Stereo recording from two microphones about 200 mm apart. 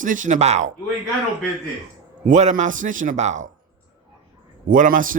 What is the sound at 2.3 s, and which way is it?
Speech, 40° right (ahead or behind).